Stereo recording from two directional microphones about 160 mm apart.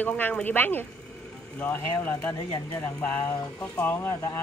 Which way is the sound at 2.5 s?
25° left (ahead or behind).